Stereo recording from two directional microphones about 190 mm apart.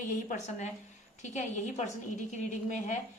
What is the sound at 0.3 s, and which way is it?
A woman's voice, 40° left (ahead or behind).